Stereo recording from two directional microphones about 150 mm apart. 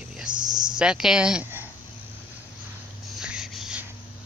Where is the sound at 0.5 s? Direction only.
30° right (ahead or behind).